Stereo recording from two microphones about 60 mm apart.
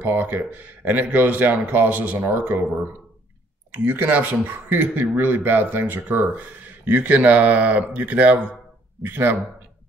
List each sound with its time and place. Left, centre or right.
0.0 s speech: right
3.7 s speech: right
9.0 s speech: right